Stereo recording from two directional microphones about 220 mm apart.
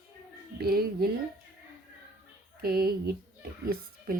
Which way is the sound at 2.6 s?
45° right (ahead or behind).